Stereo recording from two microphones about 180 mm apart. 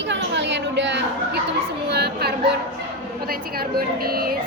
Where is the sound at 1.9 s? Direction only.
60° right (ahead or behind).